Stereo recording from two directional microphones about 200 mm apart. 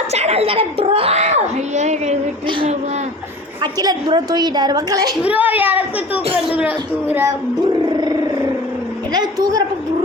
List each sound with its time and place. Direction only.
0.1 s a woman's voice: 30° right (ahead or behind)
5.2 s speech: 10° right (ahead or behind)
7.9 s a sound: 20° right (ahead or behind)
9.1 s a woman's voice: 20° right (ahead or behind)